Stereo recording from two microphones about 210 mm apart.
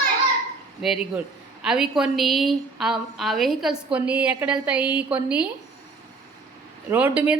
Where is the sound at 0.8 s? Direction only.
Centre (ahead or behind).